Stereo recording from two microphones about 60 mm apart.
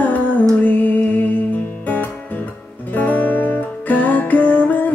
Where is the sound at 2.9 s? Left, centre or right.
Left.